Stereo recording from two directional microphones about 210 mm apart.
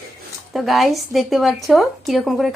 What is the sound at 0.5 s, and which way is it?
A woman's voice, centre (ahead or behind).